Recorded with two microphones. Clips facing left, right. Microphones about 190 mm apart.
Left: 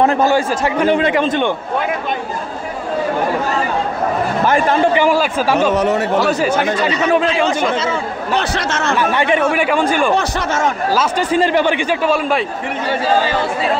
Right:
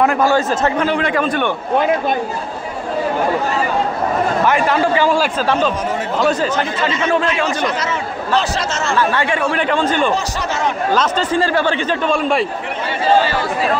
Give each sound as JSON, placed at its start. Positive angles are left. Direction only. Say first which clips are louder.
{"t": 0.0, "sound": "a man's voice", "louder": "left 1 dB", "side_deg": 25}
{"t": 0.3, "sound": "a man's voice", "louder": "even", "side_deg": 10}
{"t": 4.5, "sound": "a man's voice", "louder": "left 3 dB", "side_deg": 35}
{"t": 5.8, "sound": "speech", "louder": "left 6 dB", "side_deg": 70}
{"t": 6.1, "sound": "a man's voice", "louder": "left 2 dB", "side_deg": 5}
{"t": 7.2, "sound": "a man's voice", "louder": "left 3 dB", "side_deg": 25}
{"t": 10.1, "sound": "speech", "louder": "left 3 dB", "side_deg": 55}
{"t": 10.9, "sound": "a man's voice", "louder": "right 2 dB", "side_deg": 10}